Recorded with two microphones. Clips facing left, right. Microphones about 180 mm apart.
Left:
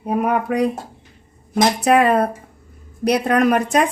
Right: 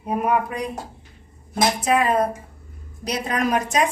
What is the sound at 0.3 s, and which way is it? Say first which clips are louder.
Speech: left 5 dB; 65° left (ahead or behind).